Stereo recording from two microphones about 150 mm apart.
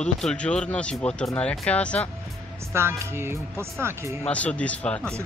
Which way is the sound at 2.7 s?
15° right (ahead or behind).